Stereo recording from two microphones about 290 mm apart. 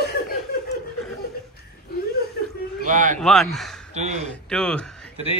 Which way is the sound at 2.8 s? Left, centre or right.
Right.